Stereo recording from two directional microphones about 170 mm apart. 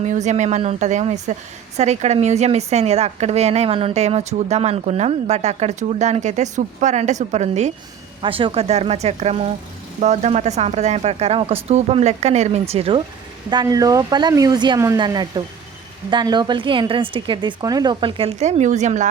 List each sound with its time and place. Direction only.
0.0 s a woman's voice: 45° right (ahead or behind)
8.2 s a woman's voice: 30° right (ahead or behind)
13.5 s speech: 25° right (ahead or behind)
18.3 s speech: 45° right (ahead or behind)